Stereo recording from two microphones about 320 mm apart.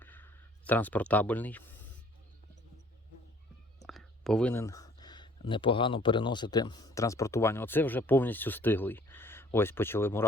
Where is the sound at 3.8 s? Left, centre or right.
Centre.